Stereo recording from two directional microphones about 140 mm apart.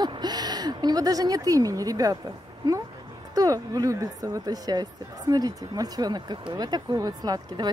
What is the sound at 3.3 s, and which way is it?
Speech, 25° right (ahead or behind).